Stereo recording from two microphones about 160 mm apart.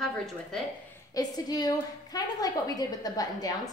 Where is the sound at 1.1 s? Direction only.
25° left (ahead or behind).